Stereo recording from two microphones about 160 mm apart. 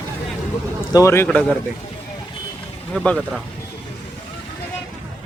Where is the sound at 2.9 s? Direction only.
5° left (ahead or behind).